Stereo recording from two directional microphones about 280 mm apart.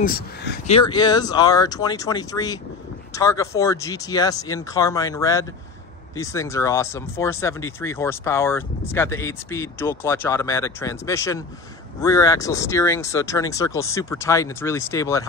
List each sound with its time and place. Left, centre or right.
0.0 s speech: left
0.7 s speech: centre